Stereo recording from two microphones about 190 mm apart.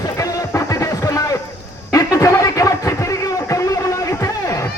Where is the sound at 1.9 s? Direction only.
15° left (ahead or behind).